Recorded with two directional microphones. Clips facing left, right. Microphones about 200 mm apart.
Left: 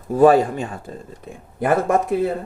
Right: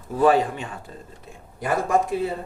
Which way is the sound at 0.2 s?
45° left (ahead or behind).